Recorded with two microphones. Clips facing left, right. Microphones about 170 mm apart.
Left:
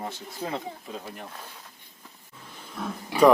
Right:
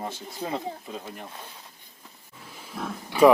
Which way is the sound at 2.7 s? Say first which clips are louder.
Even; 5° right (ahead or behind).